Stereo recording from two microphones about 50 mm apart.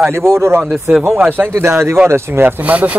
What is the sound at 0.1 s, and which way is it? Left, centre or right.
Speech, right.